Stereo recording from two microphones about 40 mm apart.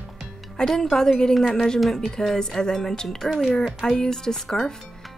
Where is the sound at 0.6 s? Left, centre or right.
Centre.